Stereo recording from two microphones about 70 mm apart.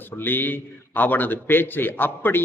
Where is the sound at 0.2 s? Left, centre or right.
Left.